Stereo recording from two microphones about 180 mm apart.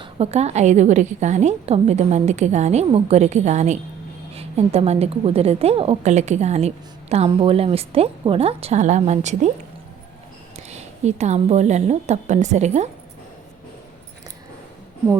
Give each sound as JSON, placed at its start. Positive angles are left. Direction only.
{"t": 0.0, "sound": "a woman's voice", "side_deg": -35}
{"t": 10.7, "sound": "a woman's voice", "side_deg": -40}